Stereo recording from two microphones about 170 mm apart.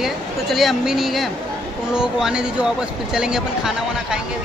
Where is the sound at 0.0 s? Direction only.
Centre (ahead or behind).